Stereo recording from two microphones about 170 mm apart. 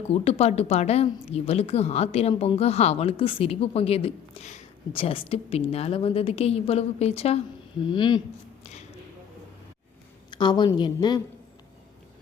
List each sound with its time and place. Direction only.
0.1 s a woman's voice: 35° left (ahead or behind)
10.3 s a woman's voice: 25° left (ahead or behind)